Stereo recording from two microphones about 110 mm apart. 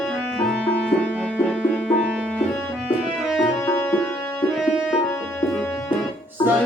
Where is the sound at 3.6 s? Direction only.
20° left (ahead or behind).